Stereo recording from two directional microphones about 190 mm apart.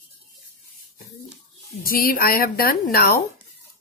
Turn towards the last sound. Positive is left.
turn(degrees=50)  # may be behind; listen again after turning